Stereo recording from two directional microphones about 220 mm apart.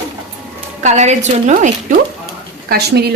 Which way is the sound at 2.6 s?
45° right (ahead or behind).